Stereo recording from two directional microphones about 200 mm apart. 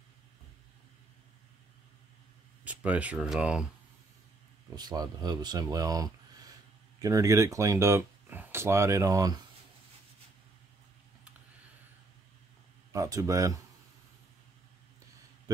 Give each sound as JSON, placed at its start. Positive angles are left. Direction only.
{"t": 2.6, "sound": "speech", "side_deg": -5}
{"t": 4.7, "sound": "speech", "side_deg": -20}
{"t": 12.9, "sound": "speech", "side_deg": -15}